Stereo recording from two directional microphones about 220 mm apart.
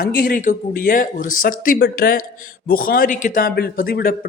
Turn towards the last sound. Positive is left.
turn(degrees=40)  # may be behind; listen again after turning